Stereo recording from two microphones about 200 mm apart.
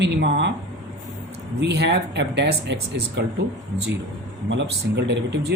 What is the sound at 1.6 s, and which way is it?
A man's voice, 55° right (ahead or behind).